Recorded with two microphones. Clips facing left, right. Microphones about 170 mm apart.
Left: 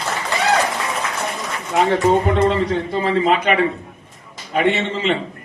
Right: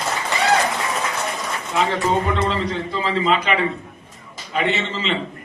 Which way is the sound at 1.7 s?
55° left (ahead or behind).